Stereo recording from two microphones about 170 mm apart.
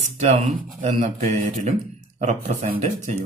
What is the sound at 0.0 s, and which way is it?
A man's voice, 45° right (ahead or behind).